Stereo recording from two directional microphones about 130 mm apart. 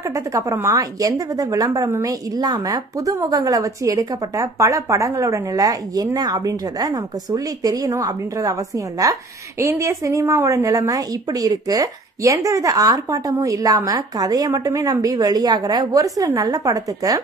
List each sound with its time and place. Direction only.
0.0 s a woman's voice: 25° right (ahead or behind)